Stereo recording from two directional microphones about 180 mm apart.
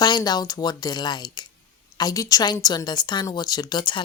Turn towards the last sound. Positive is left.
turn(degrees=25)  # may be behind; listen again after turning